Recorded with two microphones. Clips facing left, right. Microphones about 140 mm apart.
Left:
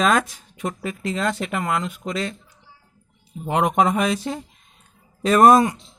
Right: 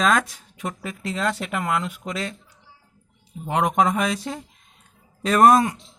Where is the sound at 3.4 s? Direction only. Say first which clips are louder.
Left 1 dB; centre (ahead or behind).